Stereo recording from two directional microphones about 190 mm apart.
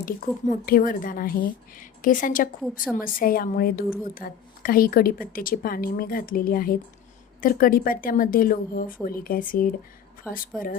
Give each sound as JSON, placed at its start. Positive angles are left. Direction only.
{"t": 0.6, "sound": "a woman's voice", "side_deg": 50}
{"t": 10.3, "sound": "a woman's voice", "side_deg": -5}